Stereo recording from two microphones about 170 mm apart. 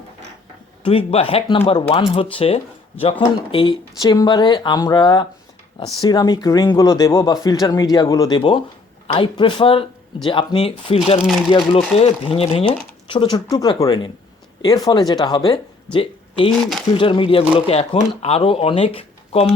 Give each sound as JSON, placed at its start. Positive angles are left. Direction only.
{"t": 0.9, "sound": "speech", "side_deg": 35}